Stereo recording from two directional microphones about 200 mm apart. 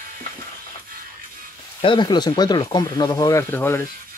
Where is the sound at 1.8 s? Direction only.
25° left (ahead or behind).